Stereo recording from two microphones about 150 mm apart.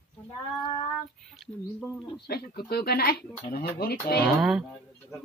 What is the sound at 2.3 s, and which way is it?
Speech, 90° left.